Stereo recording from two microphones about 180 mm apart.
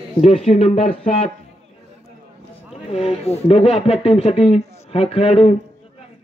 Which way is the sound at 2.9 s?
35° left (ahead or behind).